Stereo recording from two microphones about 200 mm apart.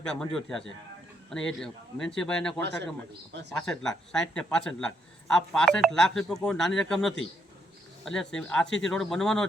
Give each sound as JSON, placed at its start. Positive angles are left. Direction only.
{"t": 0.0, "sound": "speech", "side_deg": 5}
{"t": 2.6, "sound": "a man's voice", "side_deg": -60}
{"t": 3.7, "sound": "speech", "side_deg": 5}